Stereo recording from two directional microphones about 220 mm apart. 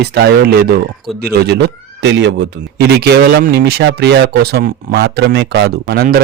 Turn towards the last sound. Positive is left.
turn(degrees=-45)  # may be behind; listen again after turning